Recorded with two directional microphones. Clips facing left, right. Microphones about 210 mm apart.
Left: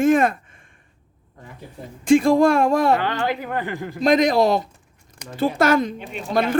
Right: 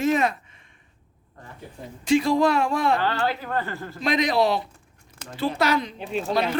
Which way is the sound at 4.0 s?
45° left (ahead or behind).